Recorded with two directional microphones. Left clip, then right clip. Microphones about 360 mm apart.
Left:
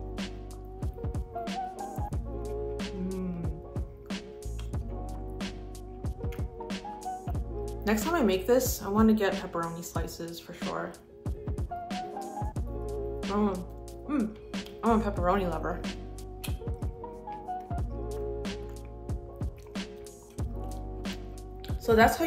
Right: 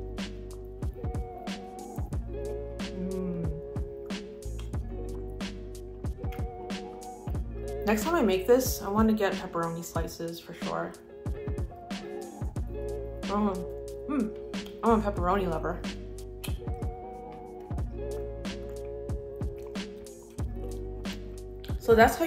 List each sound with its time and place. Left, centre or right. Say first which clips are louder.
1.0 s music: left 2 dB; centre
6.0 s music: right 1 dB; centre
21.6 s music: right 2 dB; centre